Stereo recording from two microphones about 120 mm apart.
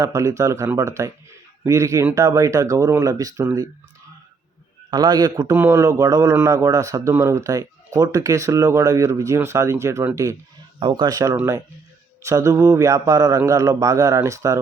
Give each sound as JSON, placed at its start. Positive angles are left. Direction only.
{"t": 0.0, "sound": "speech", "side_deg": -25}
{"t": 4.9, "sound": "a man's voice", "side_deg": -35}
{"t": 10.8, "sound": "a man's voice", "side_deg": -40}